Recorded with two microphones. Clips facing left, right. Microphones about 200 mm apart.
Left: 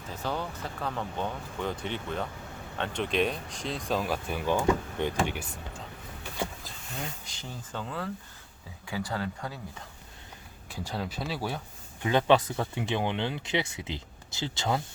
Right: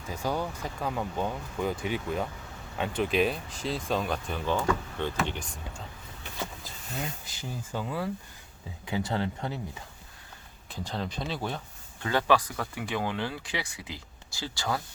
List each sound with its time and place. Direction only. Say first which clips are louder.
0.1 s speech: right 3 dB; 10° right (ahead or behind); by 5.8 s 10° left (ahead or behind)
7.3 s speech: right 3 dB; 5° right (ahead or behind)
8.9 s speech: right 3 dB; 20° right (ahead or behind)
10.7 s speech: even; 10° left (ahead or behind)
12.0 s speech: left 2 dB; 20° left (ahead or behind)